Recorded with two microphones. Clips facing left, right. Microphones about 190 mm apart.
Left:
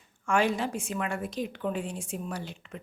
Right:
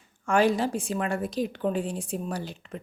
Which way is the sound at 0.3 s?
35° right (ahead or behind).